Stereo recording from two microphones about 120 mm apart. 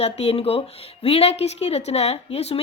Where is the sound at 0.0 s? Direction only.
60° left (ahead or behind).